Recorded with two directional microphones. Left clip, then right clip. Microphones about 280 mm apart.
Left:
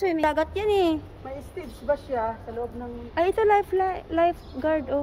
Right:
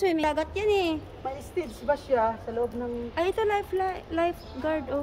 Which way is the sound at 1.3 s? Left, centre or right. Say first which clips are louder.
Right 4 dB; right.